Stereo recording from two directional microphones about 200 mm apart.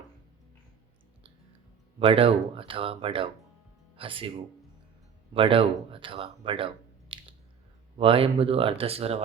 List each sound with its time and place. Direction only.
2.0 s speech: 25° right (ahead or behind)
5.3 s speech: 25° right (ahead or behind)
7.1 s squish: 25° right (ahead or behind)
7.9 s speech: 25° right (ahead or behind)